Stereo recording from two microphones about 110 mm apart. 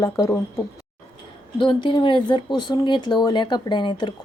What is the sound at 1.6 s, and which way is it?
Speech, 45° left (ahead or behind).